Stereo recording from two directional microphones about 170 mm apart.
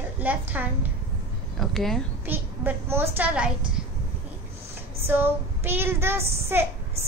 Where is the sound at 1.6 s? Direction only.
Centre (ahead or behind).